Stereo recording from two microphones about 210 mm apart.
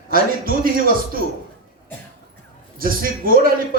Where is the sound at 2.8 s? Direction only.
45° right (ahead or behind).